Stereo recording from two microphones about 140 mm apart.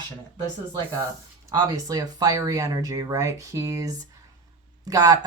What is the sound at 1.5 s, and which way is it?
Speech, 30° right (ahead or behind).